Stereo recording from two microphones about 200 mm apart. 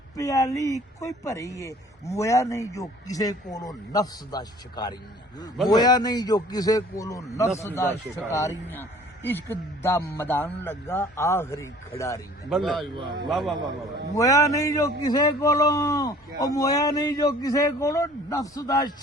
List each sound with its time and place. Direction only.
0.2 s a man's voice: 15° left (ahead or behind)
12.5 s a man's voice: centre (ahead or behind)
14.2 s a man's voice: 15° left (ahead or behind)